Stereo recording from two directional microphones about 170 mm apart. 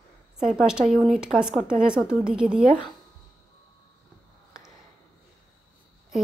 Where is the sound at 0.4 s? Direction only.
5° right (ahead or behind).